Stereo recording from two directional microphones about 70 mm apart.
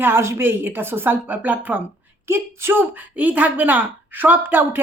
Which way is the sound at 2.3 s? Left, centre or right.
Right.